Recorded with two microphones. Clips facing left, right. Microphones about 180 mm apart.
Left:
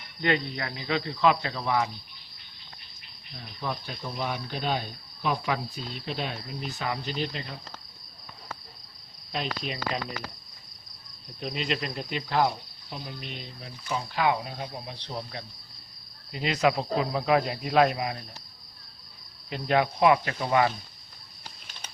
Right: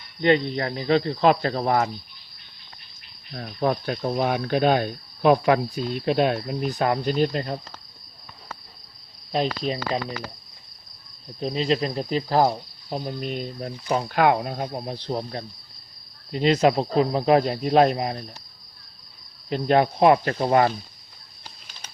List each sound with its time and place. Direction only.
0.2 s cricket: 25° right (ahead or behind)
0.6 s speech: 40° right (ahead or behind)
3.3 s speech: 60° right (ahead or behind)
9.3 s speech: 35° right (ahead or behind)
11.3 s cricket: 35° right (ahead or behind)
15.0 s speech: 40° right (ahead or behind)
19.5 s speech: 35° right (ahead or behind)